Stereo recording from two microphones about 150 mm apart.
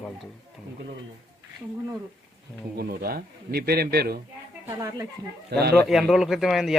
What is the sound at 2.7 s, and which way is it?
A man's voice, 90° right.